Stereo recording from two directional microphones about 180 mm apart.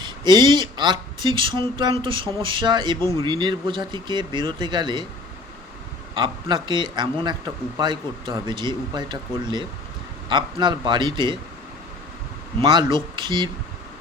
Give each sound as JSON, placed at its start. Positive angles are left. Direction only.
{"t": 0.0, "sound": "a man's voice", "side_deg": -25}
{"t": 6.1, "sound": "a man's voice", "side_deg": -25}
{"t": 12.6, "sound": "a man's voice", "side_deg": -25}